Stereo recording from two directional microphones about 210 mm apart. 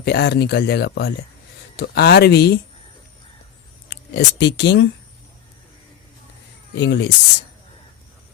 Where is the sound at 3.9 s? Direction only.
55° left (ahead or behind).